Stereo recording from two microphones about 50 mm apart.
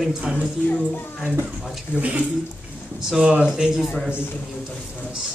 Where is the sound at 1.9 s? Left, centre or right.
Right.